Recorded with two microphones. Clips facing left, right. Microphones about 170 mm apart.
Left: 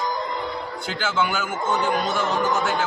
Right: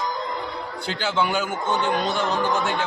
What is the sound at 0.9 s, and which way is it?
A man's voice, 35° right (ahead or behind).